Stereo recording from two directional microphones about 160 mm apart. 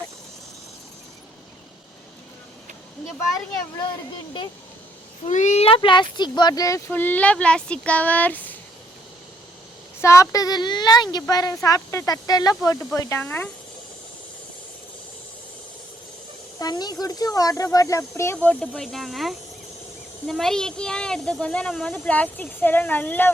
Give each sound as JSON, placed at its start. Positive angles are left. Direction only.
{"t": 5.2, "sound": "speech", "side_deg": 45}
{"t": 10.0, "sound": "a woman's voice", "side_deg": 20}
{"t": 16.6, "sound": "a woman's voice", "side_deg": 25}